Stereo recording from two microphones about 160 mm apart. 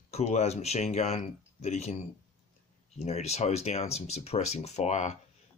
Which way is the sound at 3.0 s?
40° left (ahead or behind).